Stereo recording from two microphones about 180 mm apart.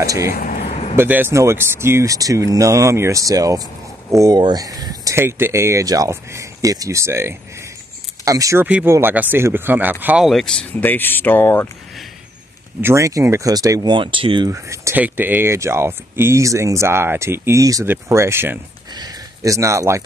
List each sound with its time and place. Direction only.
0.0 s speech: 20° right (ahead or behind)
0.3 s a sound: 45° left (ahead or behind)
0.9 s speech: 10° right (ahead or behind); by 11.7 s 10° left (ahead or behind)
12.8 s speech: 15° right (ahead or behind)
14.5 s speech: 15° right (ahead or behind)